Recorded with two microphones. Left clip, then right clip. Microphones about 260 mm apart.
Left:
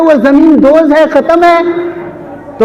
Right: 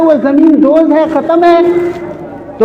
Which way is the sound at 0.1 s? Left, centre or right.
Left.